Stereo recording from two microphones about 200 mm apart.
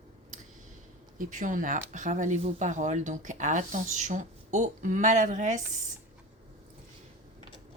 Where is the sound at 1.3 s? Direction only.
40° right (ahead or behind).